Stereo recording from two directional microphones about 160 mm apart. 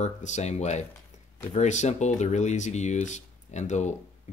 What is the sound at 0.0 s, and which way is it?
Speech, 45° left (ahead or behind).